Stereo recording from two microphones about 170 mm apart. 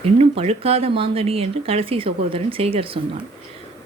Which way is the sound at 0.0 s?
40° right (ahead or behind).